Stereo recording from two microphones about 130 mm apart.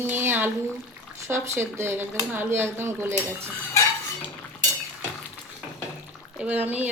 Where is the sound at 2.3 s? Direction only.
15° right (ahead or behind).